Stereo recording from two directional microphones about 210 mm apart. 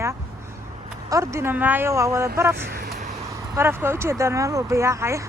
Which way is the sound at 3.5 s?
10° right (ahead or behind).